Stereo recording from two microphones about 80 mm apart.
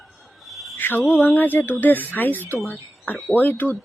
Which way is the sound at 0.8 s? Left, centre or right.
Left.